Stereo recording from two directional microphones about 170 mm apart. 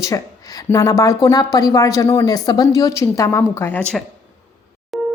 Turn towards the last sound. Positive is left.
turn(degrees=0)  # may be behind; listen again after turning